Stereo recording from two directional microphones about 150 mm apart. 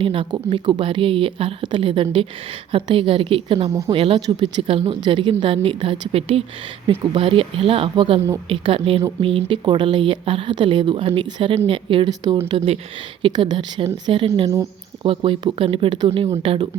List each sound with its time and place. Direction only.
0.0 s speech: 35° right (ahead or behind)